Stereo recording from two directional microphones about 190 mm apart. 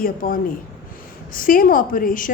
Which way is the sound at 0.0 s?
50° left (ahead or behind).